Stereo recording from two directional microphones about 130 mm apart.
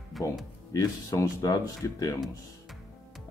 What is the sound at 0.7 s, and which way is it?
Speech, 25° left (ahead or behind).